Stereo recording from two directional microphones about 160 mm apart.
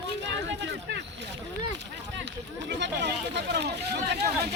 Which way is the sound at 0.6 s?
90° right.